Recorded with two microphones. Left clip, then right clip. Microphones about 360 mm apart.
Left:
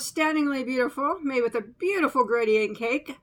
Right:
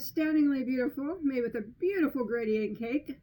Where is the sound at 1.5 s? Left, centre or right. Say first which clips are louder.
Left 5 dB; left.